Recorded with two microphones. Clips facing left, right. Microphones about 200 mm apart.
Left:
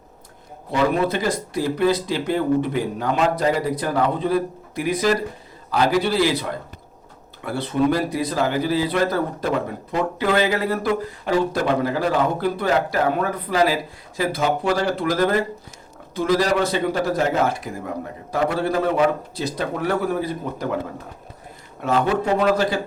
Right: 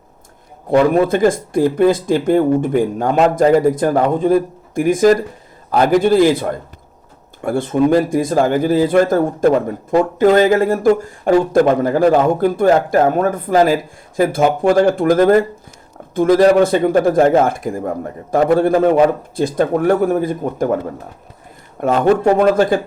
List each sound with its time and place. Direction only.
0.7 s a man's voice: 50° right (ahead or behind)
21.8 s a man's voice: 50° right (ahead or behind)